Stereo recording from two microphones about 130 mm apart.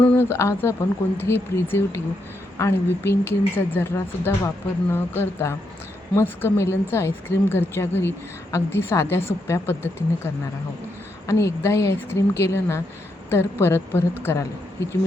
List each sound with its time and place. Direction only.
0.0 s speech: 10° left (ahead or behind)
0.3 s a woman's voice: 20° left (ahead or behind)